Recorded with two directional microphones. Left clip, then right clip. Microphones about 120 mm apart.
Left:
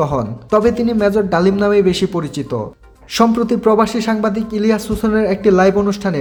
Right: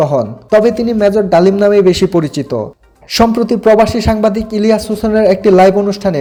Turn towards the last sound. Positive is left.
turn(degrees=-15)  # may be behind; listen again after turning